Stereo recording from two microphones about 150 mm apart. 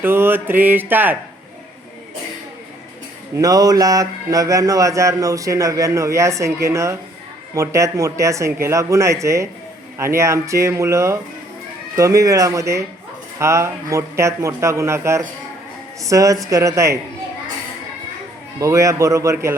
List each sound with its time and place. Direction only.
0.0 s mantra: 15° right (ahead or behind)
3.3 s speech: 25° right (ahead or behind)
18.6 s speech: 20° right (ahead or behind)